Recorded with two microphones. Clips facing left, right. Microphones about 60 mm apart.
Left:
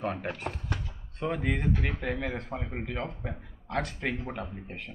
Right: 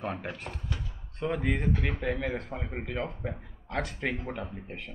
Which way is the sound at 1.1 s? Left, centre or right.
Centre.